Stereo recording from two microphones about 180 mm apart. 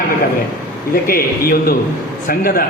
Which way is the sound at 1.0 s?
55° left (ahead or behind).